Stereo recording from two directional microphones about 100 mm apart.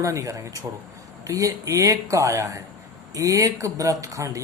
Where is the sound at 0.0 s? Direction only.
30° right (ahead or behind).